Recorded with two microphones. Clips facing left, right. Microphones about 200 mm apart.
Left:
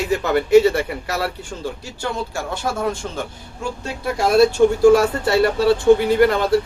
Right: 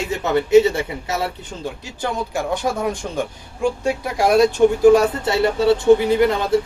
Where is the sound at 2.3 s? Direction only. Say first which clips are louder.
Right 3 dB; 15° right (ahead or behind).